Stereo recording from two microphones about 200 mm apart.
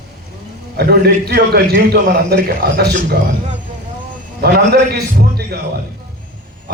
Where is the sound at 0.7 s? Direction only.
55° right (ahead or behind).